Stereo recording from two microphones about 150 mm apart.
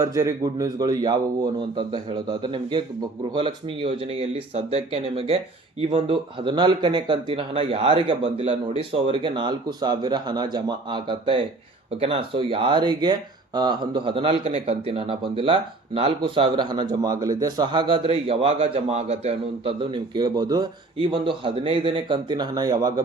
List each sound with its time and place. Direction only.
0.0 s a man's voice: 20° right (ahead or behind)